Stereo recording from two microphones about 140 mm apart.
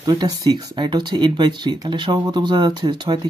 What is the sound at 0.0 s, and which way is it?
Speech, 25° right (ahead or behind).